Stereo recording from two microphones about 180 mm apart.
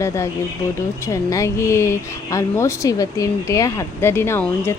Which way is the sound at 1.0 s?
15° left (ahead or behind).